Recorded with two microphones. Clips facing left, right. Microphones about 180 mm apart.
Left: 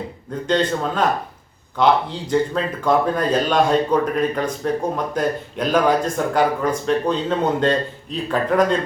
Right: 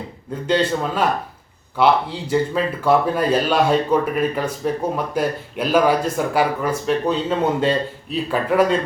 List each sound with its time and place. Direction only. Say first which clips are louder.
0.4 s speech: right 1 dB; 10° right (ahead or behind)